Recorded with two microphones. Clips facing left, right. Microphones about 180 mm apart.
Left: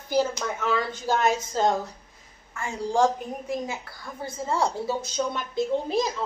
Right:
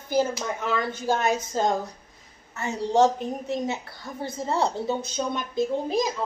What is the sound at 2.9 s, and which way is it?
Speech, 25° right (ahead or behind).